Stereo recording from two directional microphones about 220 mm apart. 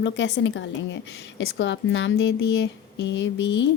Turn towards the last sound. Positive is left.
turn(degrees=55)  # may be behind; listen again after turning